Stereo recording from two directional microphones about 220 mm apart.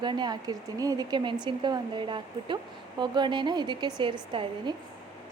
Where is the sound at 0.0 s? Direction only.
20° right (ahead or behind).